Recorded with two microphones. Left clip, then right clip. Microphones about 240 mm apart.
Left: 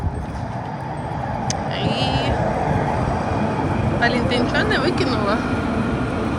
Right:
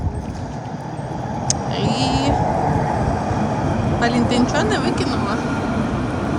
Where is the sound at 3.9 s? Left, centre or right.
Right.